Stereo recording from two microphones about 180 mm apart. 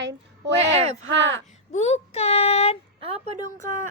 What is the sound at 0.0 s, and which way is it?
Speech, 90° right.